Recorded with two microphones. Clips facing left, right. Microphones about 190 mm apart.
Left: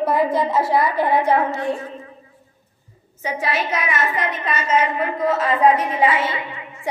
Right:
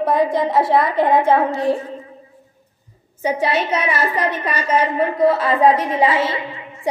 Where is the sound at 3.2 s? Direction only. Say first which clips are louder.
Right 5 dB; 30° right (ahead or behind).